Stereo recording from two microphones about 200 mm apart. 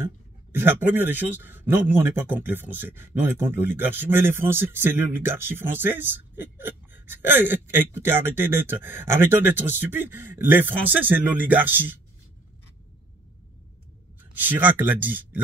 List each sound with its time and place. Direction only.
0.0 s speech: 10° right (ahead or behind)
14.3 s speech: 10° right (ahead or behind)